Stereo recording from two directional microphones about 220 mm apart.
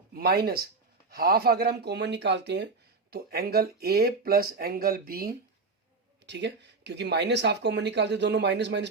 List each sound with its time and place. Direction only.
0.1 s speech: 45° right (ahead or behind)